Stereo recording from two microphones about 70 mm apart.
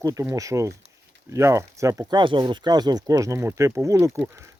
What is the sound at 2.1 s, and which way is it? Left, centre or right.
Speech, right.